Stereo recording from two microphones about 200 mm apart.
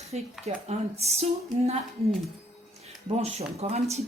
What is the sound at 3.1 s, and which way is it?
Speech, 30° right (ahead or behind).